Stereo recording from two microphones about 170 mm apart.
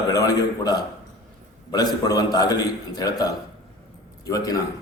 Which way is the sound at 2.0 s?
20° left (ahead or behind).